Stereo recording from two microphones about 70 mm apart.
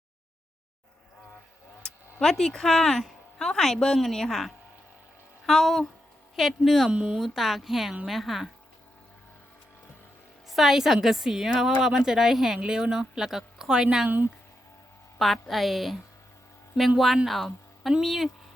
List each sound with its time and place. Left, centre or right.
1.8 s a woman's voice: centre
6.9 s a woman's voice: centre
7.2 s a woman's voice: centre
10.5 s a woman's voice: centre
15.2 s a woman's voice: centre
17.2 s a woman's voice: centre